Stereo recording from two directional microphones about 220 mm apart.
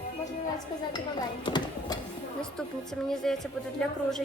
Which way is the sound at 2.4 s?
Centre (ahead or behind).